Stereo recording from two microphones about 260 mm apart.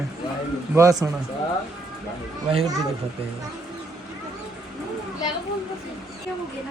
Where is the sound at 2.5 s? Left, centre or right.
Right.